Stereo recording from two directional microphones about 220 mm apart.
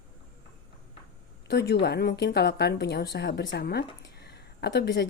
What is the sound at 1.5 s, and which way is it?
A woman's voice, 50° left (ahead or behind).